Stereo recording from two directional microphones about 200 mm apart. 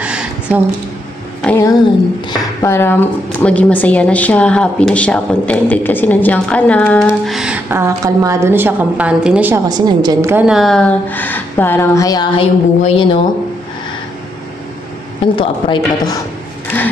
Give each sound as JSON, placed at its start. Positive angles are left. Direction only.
{"t": 0.0, "sound": "a sound", "side_deg": -5}
{"t": 1.4, "sound": "a woman's voice", "side_deg": 10}
{"t": 9.7, "sound": "a woman's voice", "side_deg": -20}
{"t": 10.3, "sound": "a woman's voice", "side_deg": -5}
{"t": 15.3, "sound": "a woman's voice", "side_deg": 25}